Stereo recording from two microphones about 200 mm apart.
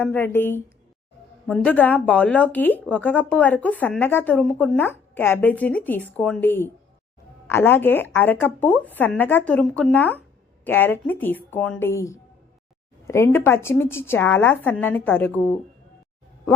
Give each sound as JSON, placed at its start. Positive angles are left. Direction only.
{"t": 0.0, "sound": "a woman's voice", "side_deg": 10}